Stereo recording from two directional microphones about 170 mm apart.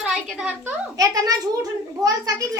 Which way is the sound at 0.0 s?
5° right (ahead or behind).